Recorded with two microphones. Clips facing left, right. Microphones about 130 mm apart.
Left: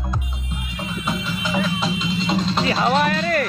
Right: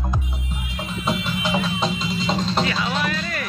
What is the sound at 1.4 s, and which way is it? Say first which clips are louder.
Music: left 1 dB; 35° right (ahead or behind).